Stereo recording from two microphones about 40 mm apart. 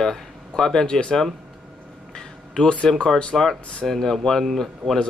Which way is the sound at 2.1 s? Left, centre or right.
Centre.